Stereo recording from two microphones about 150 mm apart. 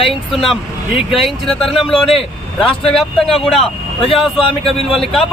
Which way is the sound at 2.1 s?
35° left (ahead or behind).